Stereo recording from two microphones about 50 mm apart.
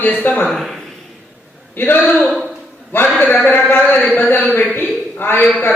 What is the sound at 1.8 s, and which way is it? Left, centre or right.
Speech, left.